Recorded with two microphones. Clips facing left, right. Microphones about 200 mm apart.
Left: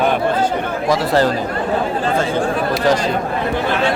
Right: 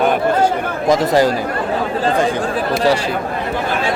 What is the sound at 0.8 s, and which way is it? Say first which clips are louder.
Speech: right 3 dB; 15° right (ahead or behind).